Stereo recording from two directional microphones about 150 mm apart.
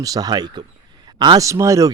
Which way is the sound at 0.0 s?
25° right (ahead or behind).